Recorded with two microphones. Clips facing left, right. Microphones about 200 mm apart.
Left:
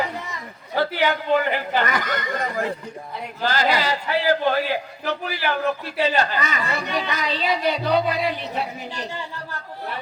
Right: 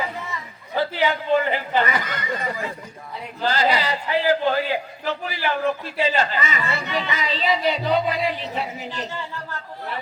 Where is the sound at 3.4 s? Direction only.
45° left (ahead or behind).